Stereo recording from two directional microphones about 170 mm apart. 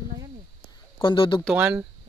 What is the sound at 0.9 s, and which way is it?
Speech, 30° left (ahead or behind).